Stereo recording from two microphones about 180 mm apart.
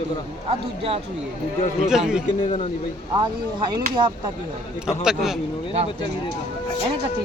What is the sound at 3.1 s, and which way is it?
Speech, 25° right (ahead or behind).